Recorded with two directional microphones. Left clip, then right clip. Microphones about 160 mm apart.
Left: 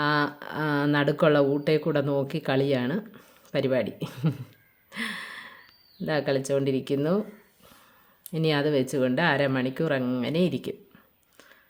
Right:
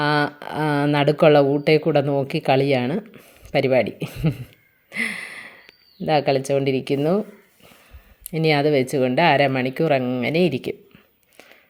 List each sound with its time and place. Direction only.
0.0 s speech: 15° right (ahead or behind)
4.9 s a sound: 15° right (ahead or behind)
6.1 s speech: 15° right (ahead or behind)
8.3 s speech: 10° right (ahead or behind)